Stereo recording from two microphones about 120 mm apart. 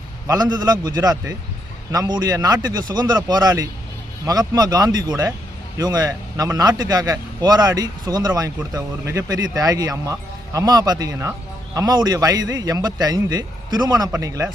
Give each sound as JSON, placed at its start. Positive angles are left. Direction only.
{"t": 0.5, "sound": "a man's voice", "side_deg": -35}